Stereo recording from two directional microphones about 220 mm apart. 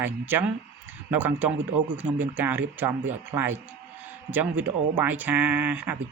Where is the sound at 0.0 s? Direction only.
10° right (ahead or behind).